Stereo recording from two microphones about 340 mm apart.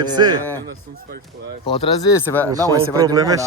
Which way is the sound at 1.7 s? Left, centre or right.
Centre.